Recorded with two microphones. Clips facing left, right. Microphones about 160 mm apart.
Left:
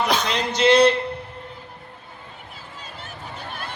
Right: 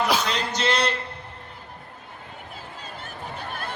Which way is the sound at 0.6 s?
25° left (ahead or behind).